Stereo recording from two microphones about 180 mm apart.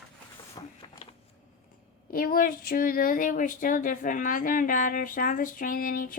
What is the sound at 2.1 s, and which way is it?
Speech, 55° left (ahead or behind).